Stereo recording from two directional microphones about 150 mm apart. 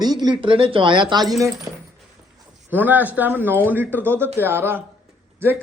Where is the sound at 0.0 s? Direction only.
25° right (ahead or behind).